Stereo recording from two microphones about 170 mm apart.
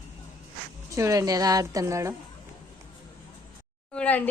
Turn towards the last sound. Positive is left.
turn(degrees=5)  # may be behind; listen again after turning